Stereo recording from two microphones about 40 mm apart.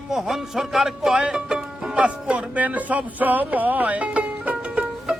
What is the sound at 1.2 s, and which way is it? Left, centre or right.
Music, right.